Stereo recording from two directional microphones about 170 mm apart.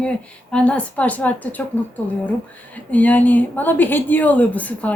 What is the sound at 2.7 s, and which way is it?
A woman's voice, 10° left (ahead or behind).